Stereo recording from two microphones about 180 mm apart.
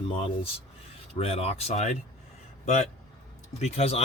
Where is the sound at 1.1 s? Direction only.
35° left (ahead or behind).